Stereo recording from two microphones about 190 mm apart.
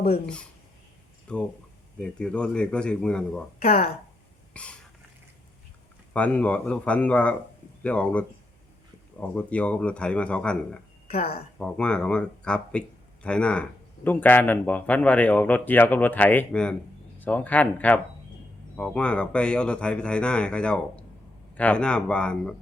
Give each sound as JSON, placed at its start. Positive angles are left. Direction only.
{"t": 1.3, "sound": "speech", "side_deg": 5}
{"t": 3.6, "sound": "speech", "side_deg": 30}
{"t": 4.5, "sound": "cough", "side_deg": 5}
{"t": 6.1, "sound": "speech", "side_deg": 5}
{"t": 9.2, "sound": "speech", "side_deg": 5}